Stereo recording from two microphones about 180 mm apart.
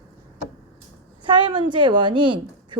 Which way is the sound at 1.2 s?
25° right (ahead or behind).